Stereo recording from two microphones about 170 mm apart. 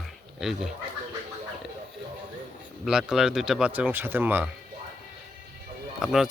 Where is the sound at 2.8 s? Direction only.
5° right (ahead or behind).